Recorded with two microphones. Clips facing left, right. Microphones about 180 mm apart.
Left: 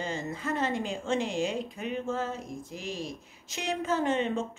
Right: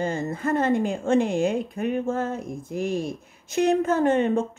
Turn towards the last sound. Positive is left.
turn(degrees=-50)  # may be behind; listen again after turning